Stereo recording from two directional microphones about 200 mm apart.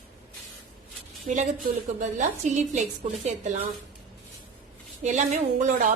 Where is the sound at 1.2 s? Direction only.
40° right (ahead or behind).